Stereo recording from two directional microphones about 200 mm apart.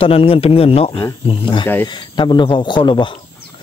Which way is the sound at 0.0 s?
30° left (ahead or behind).